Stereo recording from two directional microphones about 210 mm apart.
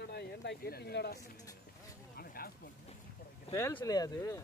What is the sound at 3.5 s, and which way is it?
Speech, 15° left (ahead or behind).